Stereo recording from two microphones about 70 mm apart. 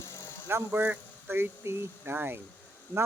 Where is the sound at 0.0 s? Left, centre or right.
Left.